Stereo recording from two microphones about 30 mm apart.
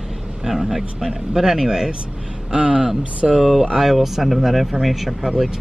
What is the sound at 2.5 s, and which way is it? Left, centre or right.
Speech, right.